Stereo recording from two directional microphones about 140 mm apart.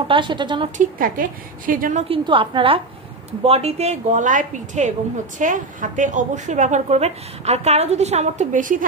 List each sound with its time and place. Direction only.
0.1 s a woman's voice: 35° right (ahead or behind)
0.7 s a woman's voice: 80° right
2.0 s a woman's voice: 40° right (ahead or behind); by 8.8 s 70° right (ahead or behind)